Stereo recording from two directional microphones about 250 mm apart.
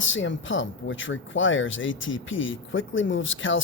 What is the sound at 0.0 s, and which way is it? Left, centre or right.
Speech, left.